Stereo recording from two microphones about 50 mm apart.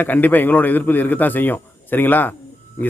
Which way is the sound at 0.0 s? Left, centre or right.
Left.